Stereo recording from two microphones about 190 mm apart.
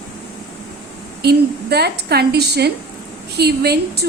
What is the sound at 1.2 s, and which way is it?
A woman's voice, 60° right (ahead or behind).